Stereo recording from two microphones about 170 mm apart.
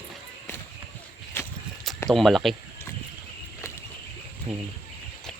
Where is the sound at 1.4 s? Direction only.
15° left (ahead or behind).